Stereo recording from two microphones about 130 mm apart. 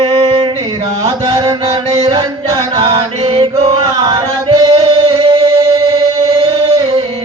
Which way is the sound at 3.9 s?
35° right (ahead or behind).